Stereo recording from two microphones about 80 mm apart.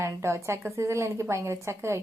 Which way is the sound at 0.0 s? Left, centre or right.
Right.